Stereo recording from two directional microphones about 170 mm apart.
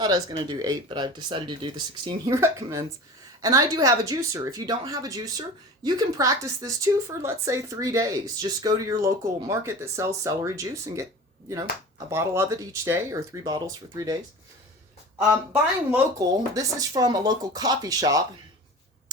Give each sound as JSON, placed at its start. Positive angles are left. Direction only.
{"t": 0.0, "sound": "speech", "side_deg": -25}
{"t": 15.9, "sound": "speech", "side_deg": -20}